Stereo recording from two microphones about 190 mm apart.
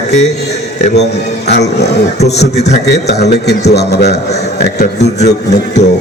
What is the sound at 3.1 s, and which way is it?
A man's voice, 60° left (ahead or behind).